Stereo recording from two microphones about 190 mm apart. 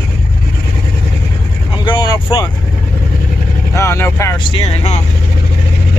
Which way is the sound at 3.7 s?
15° left (ahead or behind).